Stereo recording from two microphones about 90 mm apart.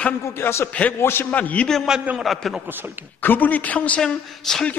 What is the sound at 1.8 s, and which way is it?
Speech, 5° right (ahead or behind).